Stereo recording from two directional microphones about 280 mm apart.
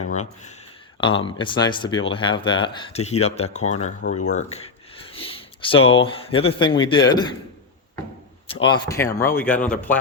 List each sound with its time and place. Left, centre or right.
0.1 s speech: left
8.6 s speech: centre